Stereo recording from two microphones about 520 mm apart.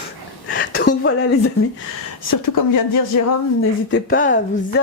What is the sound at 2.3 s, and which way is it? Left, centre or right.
Speech, left.